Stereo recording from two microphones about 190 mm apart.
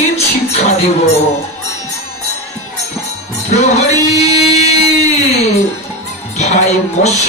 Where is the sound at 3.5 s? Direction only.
35° left (ahead or behind).